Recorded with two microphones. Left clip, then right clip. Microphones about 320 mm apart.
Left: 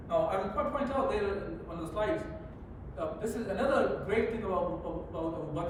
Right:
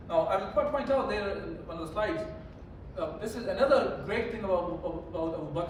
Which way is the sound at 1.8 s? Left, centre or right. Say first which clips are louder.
Right 1 dB; centre.